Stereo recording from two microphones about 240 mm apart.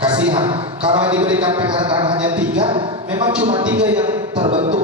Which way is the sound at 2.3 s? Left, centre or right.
Centre.